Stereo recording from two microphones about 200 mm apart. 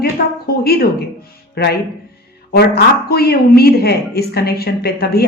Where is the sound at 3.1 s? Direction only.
50° left (ahead or behind).